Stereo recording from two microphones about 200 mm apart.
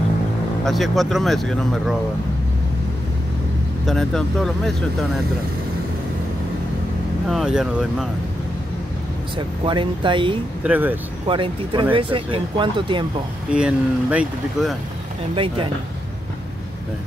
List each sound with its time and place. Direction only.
0.7 s speech: centre (ahead or behind)
3.8 s speech: centre (ahead or behind)
7.2 s speech: centre (ahead or behind)
9.7 s speech: 25° right (ahead or behind)
10.6 s speech: 10° right (ahead or behind)
11.2 s speech: 25° right (ahead or behind)
13.5 s speech: 5° right (ahead or behind)
15.3 s speech: 25° right (ahead or behind)